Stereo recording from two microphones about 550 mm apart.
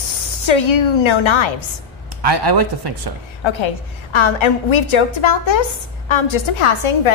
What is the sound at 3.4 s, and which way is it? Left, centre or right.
A woman's voice, left.